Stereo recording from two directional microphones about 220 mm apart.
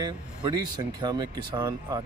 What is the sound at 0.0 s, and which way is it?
A man's voice, 20° right (ahead or behind).